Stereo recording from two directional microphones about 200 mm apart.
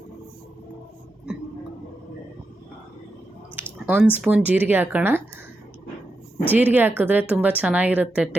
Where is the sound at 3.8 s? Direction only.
5° right (ahead or behind).